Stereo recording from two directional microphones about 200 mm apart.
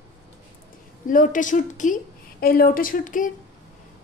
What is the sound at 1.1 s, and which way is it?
A woman's voice, 40° left (ahead or behind).